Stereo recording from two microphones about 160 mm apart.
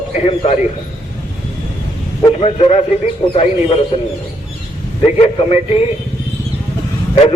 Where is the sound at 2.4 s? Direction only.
40° left (ahead or behind).